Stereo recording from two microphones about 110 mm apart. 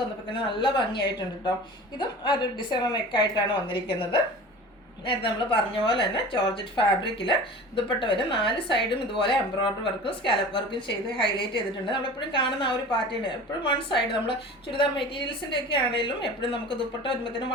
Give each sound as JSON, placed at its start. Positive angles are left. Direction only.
{"t": 0.3, "sound": "a woman's voice", "side_deg": 50}